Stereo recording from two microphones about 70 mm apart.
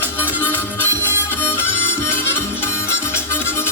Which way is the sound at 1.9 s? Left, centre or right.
Left.